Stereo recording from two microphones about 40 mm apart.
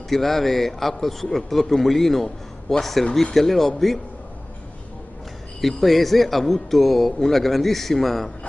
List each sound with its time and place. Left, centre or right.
0.1 s a man's voice: centre
5.6 s a man's voice: centre